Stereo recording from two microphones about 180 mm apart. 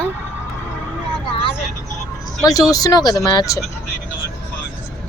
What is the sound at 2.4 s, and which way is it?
Speech, 20° left (ahead or behind).